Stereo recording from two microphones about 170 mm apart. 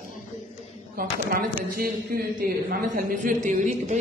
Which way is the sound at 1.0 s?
55° right (ahead or behind).